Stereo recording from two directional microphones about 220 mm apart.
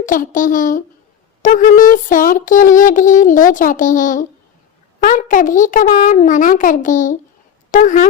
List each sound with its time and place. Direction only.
0.0 s speech: 35° left (ahead or behind)